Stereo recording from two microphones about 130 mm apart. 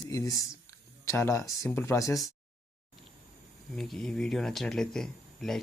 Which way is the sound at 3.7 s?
5° left (ahead or behind).